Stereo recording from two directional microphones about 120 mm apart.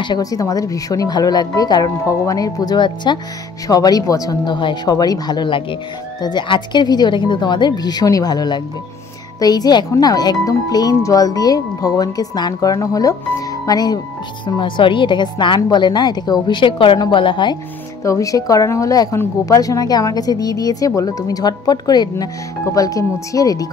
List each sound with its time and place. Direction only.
0.0 s speech: 35° left (ahead or behind)
18.0 s a woman's voice: 25° left (ahead or behind)